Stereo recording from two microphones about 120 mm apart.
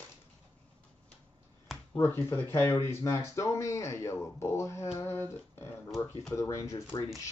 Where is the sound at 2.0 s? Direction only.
20° left (ahead or behind).